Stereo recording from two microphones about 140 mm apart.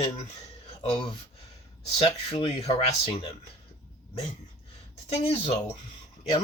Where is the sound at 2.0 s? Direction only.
50° left (ahead or behind).